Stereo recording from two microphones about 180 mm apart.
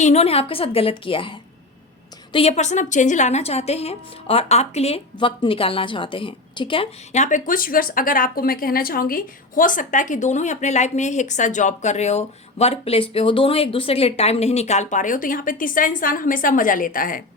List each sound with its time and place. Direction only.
0.0 s a woman's voice: 35° left (ahead or behind)
7.1 s speech: 45° left (ahead or behind)